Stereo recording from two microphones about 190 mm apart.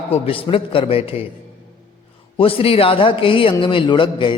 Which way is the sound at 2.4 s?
30° left (ahead or behind).